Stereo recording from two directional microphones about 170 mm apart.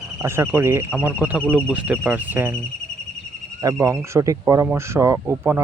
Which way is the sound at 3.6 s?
20° right (ahead or behind).